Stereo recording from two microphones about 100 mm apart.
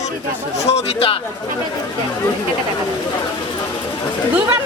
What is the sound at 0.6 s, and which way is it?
Speech, 90° left.